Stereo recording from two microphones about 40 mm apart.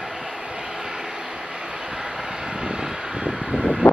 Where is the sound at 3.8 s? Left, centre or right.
Left.